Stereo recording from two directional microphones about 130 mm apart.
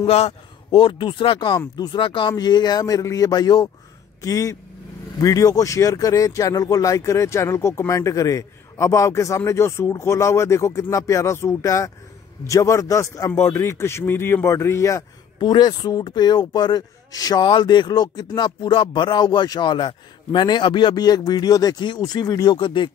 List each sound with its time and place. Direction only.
0.0 s a man's voice: 55° left (ahead or behind); by 22.8 s 35° left (ahead or behind)